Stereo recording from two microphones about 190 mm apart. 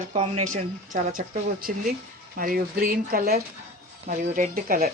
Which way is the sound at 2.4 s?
50° right (ahead or behind).